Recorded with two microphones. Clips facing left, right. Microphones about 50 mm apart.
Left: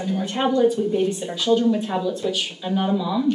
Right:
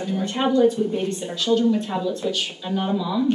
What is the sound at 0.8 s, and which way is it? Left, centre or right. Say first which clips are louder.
Speech: left 2 dB; right.